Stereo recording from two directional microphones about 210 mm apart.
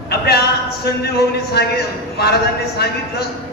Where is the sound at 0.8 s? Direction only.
50° left (ahead or behind).